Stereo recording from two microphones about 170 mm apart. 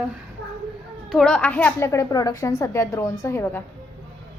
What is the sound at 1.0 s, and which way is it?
A woman's voice, centre (ahead or behind).